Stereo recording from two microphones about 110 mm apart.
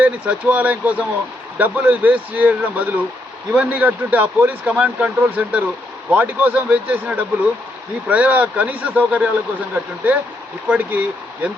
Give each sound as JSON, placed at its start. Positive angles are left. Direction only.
{"t": 0.0, "sound": "speech", "side_deg": -15}